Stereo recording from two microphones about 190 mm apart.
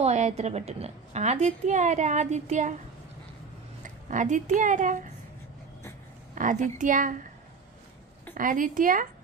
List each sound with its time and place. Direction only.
0.0 s a woman's voice: 35° right (ahead or behind)
4.1 s a woman's voice: 40° right (ahead or behind)
6.3 s a woman's voice: 45° right (ahead or behind)
8.4 s a woman's voice: 45° right (ahead or behind)